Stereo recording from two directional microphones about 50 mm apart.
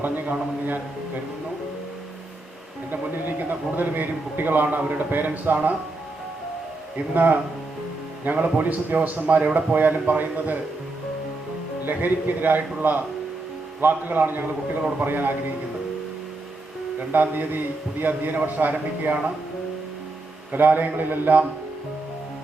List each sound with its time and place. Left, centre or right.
0.0 s a sound: right
2.9 s a man's voice: right
6.9 s a man's voice: right
11.9 s a man's voice: right
17.0 s a man's voice: right
20.5 s a man's voice: right